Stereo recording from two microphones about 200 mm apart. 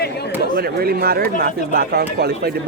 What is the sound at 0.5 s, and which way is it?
Speech, 50° right (ahead or behind).